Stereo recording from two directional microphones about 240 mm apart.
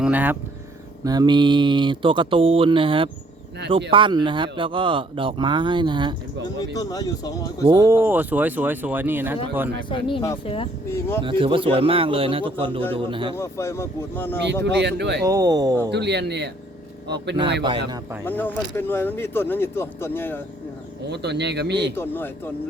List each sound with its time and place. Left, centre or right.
0.0 s speech: centre
6.7 s speech: centre
7.6 s speech: centre
9.9 s speech: centre
10.8 s speech: centre
11.2 s speech: right
13.3 s speech: centre
14.4 s speech: right
15.2 s speech: centre
15.9 s speech: right
17.6 s speech: centre
18.3 s speech: centre
21.1 s speech: right
21.9 s speech: centre